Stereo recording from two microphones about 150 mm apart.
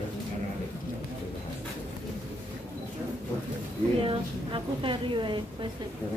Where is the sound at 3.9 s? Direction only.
35° right (ahead or behind).